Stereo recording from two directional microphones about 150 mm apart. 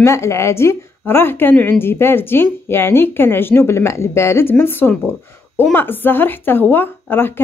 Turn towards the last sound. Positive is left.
turn(degrees=15)  # may be behind; listen again after turning